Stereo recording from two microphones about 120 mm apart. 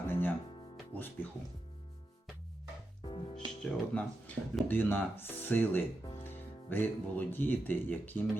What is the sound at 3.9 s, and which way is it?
Speech, 10° left (ahead or behind).